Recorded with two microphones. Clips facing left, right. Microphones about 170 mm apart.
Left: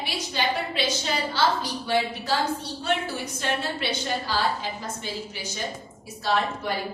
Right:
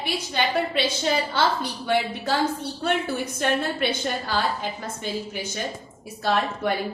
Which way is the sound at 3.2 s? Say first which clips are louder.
Right 4 dB; 55° right (ahead or behind).